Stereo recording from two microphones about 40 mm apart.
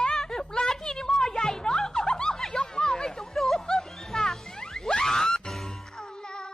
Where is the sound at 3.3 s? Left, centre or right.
Centre.